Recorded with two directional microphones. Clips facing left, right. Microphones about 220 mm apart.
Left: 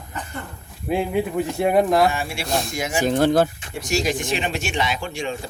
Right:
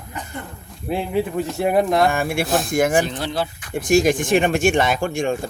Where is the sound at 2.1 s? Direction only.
50° right (ahead or behind).